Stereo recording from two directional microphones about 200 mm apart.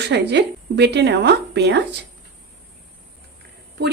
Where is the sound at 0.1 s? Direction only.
60° right (ahead or behind).